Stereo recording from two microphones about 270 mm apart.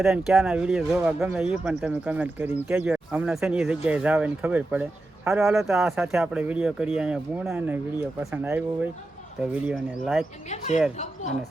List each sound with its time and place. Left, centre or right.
0.0 s speech: centre
10.9 s speech: left